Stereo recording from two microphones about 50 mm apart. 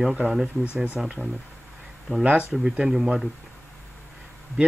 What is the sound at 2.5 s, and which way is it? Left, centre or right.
Speech, centre.